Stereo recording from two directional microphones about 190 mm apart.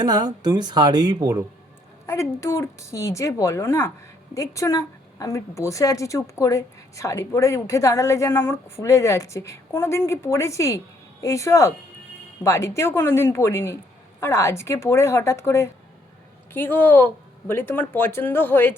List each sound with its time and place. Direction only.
0.0 s speech: 20° right (ahead or behind)
2.0 s a woman's voice: 15° left (ahead or behind)